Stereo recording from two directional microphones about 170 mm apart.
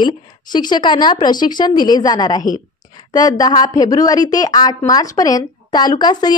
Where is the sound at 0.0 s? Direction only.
25° left (ahead or behind).